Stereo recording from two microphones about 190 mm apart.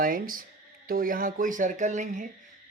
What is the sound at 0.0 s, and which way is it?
Speech, 45° right (ahead or behind).